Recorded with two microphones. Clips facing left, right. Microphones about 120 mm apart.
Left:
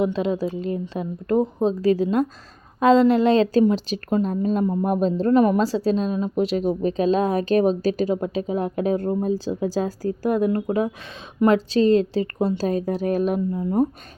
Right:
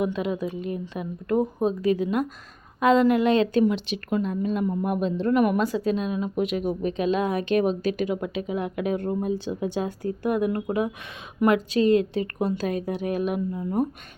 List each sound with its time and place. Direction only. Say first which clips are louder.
0.0 s a woman's voice: left 4 dB; 30° left (ahead or behind)